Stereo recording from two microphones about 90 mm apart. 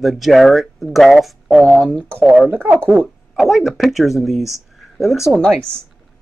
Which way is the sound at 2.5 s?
20° right (ahead or behind).